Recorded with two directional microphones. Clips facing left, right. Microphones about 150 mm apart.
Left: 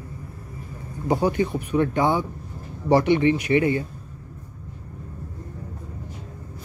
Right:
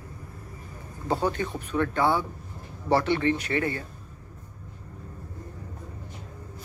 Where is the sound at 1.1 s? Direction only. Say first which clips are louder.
Left 5 dB; 15° left (ahead or behind).